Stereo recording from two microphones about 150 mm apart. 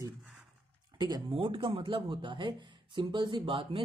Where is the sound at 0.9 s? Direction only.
30° right (ahead or behind).